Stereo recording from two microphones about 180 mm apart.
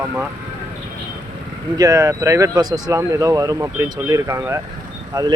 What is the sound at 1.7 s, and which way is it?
Speech, 20° right (ahead or behind).